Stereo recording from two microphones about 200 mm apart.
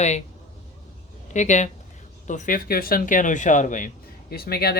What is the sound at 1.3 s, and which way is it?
Speech, 35° left (ahead or behind).